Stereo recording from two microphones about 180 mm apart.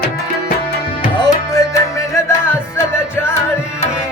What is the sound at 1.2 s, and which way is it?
Music, 20° left (ahead or behind).